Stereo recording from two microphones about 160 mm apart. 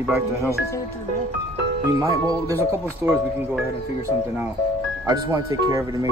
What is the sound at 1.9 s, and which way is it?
Speech, 20° right (ahead or behind).